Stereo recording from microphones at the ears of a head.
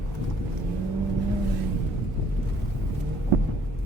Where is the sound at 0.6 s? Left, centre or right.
Right.